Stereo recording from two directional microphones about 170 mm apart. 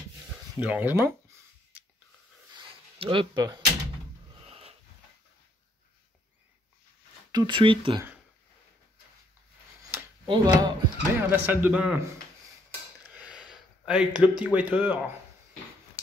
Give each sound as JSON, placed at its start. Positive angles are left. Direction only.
{"t": 0.6, "sound": "speech", "side_deg": -10}
{"t": 2.5, "sound": "a sound", "side_deg": -30}
{"t": 4.5, "sound": "dog", "side_deg": -35}
{"t": 7.3, "sound": "speech", "side_deg": -30}
{"t": 10.2, "sound": "speech", "side_deg": -25}
{"t": 11.1, "sound": "speech", "side_deg": -10}
{"t": 13.1, "sound": "a sound", "side_deg": -5}